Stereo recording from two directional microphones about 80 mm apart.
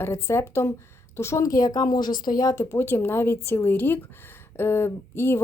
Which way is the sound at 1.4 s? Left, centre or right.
Left.